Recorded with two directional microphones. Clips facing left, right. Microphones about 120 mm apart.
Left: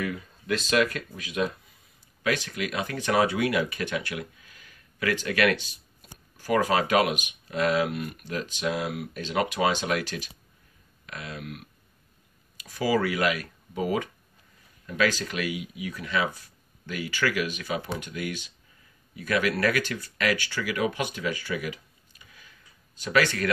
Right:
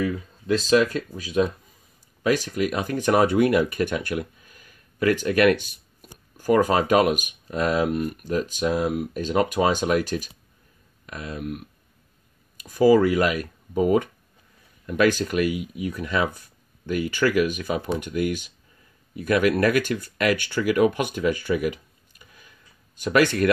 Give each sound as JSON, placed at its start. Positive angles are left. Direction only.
{"t": 0.0, "sound": "speech", "side_deg": -30}
{"t": 12.5, "sound": "speech", "side_deg": -45}
{"t": 22.9, "sound": "speech", "side_deg": -50}